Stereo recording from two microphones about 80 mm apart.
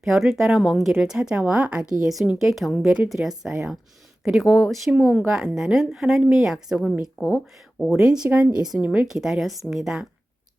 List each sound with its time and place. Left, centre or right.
0.0 s a woman's voice: centre
7.2 s speech: centre
7.8 s speech: centre
8.0 s speech: centre
8.8 s a woman's voice: centre
9.0 s a woman's voice: centre